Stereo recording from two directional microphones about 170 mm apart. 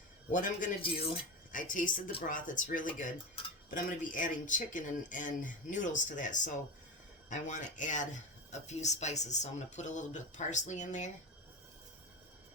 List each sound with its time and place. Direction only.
0.3 s speech: 50° left (ahead or behind)
3.4 s cutlery: 35° left (ahead or behind)
3.8 s speech: 50° left (ahead or behind)